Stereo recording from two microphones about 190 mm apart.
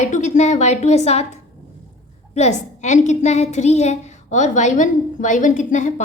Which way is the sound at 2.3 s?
35° left (ahead or behind).